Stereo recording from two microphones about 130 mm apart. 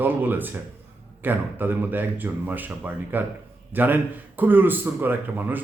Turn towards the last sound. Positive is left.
turn(degrees=-15)  # may be behind; listen again after turning